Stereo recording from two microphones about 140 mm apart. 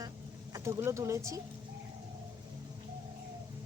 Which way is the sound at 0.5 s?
20° right (ahead or behind).